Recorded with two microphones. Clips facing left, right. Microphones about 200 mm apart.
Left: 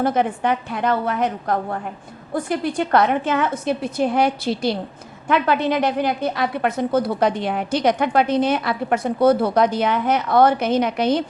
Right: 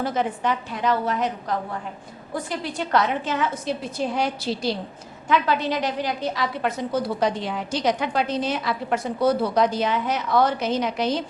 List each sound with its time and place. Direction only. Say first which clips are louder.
0.0 s a woman's voice: left 5 dB; 55° left (ahead or behind)